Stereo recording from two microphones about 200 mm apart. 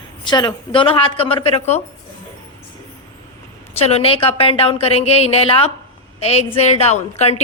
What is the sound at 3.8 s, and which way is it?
A woman's voice, 30° left (ahead or behind).